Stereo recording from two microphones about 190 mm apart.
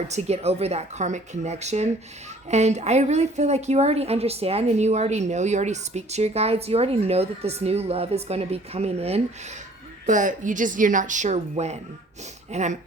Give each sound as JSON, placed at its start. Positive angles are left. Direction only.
{"t": 0.1, "sound": "a woman's voice", "side_deg": -35}